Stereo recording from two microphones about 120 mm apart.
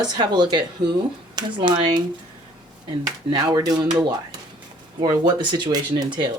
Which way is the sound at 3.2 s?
35° right (ahead or behind).